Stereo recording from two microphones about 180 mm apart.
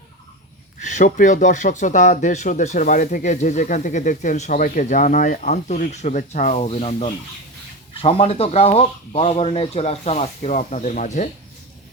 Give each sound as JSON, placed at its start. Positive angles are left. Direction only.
{"t": 0.8, "sound": "speech", "side_deg": 45}